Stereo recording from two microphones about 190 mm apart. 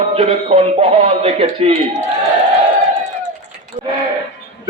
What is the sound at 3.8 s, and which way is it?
Speech, 30° right (ahead or behind).